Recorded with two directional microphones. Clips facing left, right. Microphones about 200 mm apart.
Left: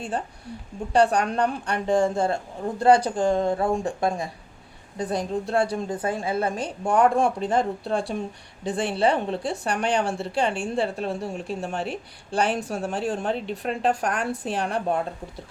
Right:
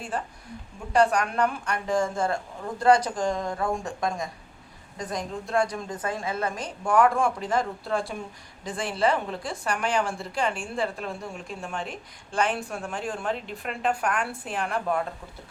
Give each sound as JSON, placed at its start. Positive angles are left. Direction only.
{"t": 0.9, "sound": "speech", "side_deg": 35}